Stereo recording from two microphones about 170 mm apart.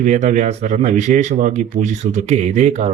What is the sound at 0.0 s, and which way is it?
Speech, 50° right (ahead or behind).